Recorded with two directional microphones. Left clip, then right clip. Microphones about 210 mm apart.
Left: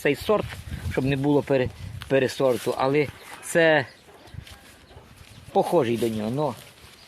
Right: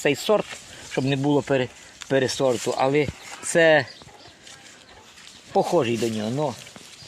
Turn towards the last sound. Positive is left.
turn(degrees=-10)  # may be behind; listen again after turning